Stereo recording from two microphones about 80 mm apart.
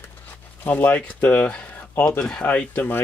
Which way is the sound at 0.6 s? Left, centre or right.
Left.